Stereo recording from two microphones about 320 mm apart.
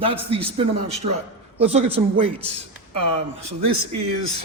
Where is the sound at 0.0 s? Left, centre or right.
Centre.